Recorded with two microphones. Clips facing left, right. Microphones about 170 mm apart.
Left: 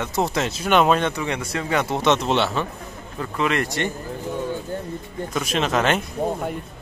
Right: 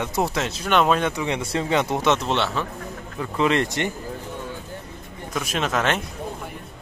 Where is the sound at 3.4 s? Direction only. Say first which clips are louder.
Right 2 dB; 25° right (ahead or behind).